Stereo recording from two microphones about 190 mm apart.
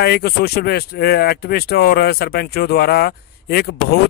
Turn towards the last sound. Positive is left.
turn(degrees=60)  # may be behind; listen again after turning